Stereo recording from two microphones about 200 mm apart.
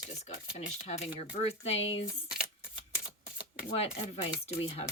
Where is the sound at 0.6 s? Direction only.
35° left (ahead or behind).